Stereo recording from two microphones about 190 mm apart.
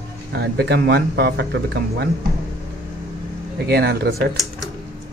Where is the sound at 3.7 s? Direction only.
60° right (ahead or behind).